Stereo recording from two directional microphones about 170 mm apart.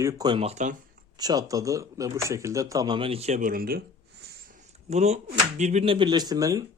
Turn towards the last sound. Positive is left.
turn(degrees=-20)  # may be behind; listen again after turning